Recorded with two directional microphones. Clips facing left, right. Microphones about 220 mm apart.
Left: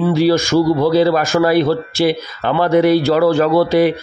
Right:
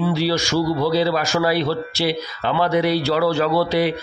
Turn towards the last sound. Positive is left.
turn(degrees=50)  # may be behind; listen again after turning